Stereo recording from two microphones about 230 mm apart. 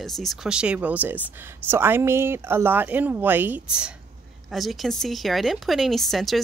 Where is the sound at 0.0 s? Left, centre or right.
Centre.